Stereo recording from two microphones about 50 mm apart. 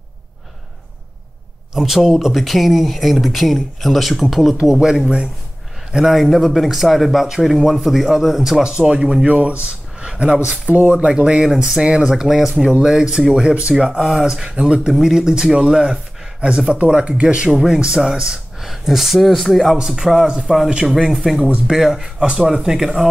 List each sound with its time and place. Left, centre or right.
1.7 s a man's voice: centre
4.6 s a man's voice: centre
10.7 s speech: right
13.8 s speech: centre; by 17.5 s right
17.5 s speech: centre
18.6 s a man's voice: centre
21.4 s speech: centre
21.7 s a man's voice: centre
22.2 s speech: right